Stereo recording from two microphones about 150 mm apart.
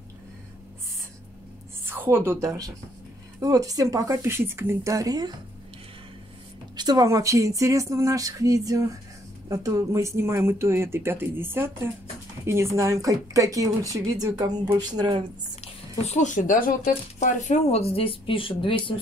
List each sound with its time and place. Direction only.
1.9 s a woman's voice: 15° right (ahead or behind)
6.8 s speech: 25° right (ahead or behind)
15.6 s speech: 45° left (ahead or behind)